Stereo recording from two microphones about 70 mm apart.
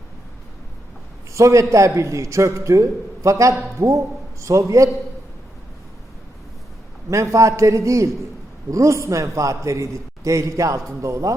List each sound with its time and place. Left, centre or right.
1.3 s a man's voice: right
7.1 s a man's voice: right